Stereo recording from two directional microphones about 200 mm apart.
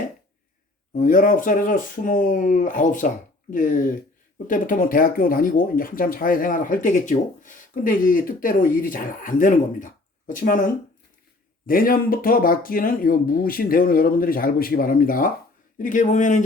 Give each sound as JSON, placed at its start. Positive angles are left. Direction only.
{"t": 0.9, "sound": "speech", "side_deg": 40}